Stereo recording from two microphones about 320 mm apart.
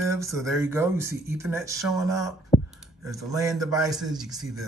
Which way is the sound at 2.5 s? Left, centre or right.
Centre.